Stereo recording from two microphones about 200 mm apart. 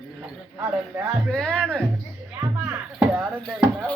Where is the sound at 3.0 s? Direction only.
5° right (ahead or behind).